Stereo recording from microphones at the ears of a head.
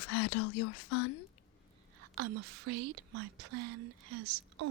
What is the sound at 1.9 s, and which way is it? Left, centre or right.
Speech, right.